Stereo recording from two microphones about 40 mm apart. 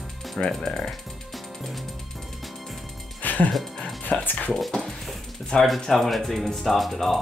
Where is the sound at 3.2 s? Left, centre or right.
Left.